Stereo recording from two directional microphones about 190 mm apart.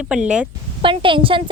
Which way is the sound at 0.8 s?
25° right (ahead or behind).